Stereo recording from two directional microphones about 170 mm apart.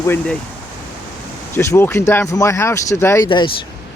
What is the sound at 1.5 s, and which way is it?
Speech, 15° left (ahead or behind).